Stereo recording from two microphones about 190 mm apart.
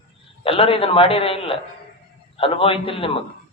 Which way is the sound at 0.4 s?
30° left (ahead or behind).